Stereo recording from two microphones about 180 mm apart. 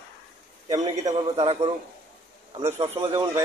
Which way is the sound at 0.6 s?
20° right (ahead or behind).